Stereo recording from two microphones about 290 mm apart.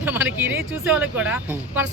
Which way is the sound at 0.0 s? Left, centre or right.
Centre.